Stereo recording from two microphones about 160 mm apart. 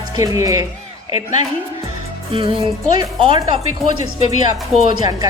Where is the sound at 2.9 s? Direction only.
30° right (ahead or behind).